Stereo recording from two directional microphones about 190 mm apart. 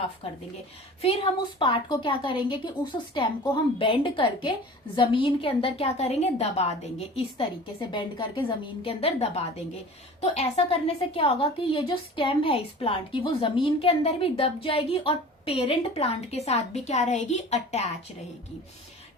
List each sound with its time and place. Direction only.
1.0 s a woman's voice: 25° left (ahead or behind)